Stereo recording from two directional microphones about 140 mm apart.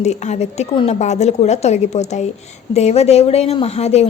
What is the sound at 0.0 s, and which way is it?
A woman's voice, 55° left (ahead or behind).